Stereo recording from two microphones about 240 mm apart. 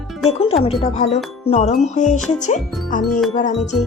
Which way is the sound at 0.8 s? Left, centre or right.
Left.